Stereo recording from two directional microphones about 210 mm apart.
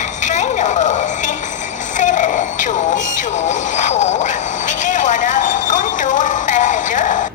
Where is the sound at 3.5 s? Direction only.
35° left (ahead or behind).